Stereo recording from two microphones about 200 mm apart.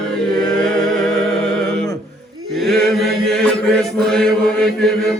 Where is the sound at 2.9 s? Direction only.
Centre (ahead or behind).